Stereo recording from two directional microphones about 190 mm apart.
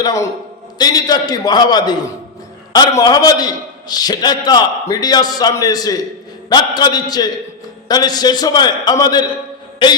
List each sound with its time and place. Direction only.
0.0 s a man's voice: 20° left (ahead or behind)